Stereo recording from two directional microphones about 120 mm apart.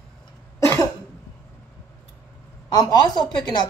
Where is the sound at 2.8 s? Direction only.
35° left (ahead or behind).